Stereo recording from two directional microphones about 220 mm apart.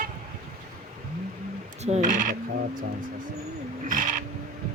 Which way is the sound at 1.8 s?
35° right (ahead or behind).